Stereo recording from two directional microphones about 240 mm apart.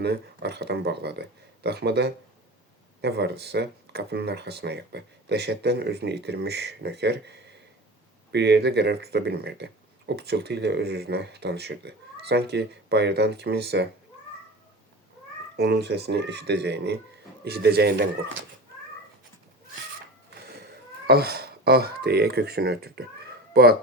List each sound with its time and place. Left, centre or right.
0.0 s speech: right
15.5 s speech: right
21.1 s speech: right